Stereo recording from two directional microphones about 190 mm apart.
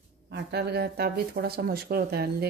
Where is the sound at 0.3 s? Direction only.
60° right (ahead or behind).